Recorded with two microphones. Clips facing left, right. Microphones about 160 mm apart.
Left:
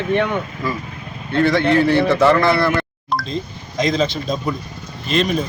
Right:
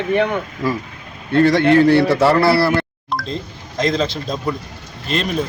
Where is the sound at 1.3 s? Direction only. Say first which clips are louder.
Right 3 dB; 40° right (ahead or behind).